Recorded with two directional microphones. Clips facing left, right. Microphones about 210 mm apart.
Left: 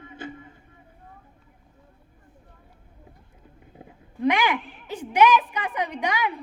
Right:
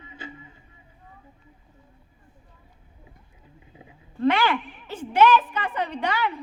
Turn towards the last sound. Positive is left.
turn(degrees=15)  # may be behind; listen again after turning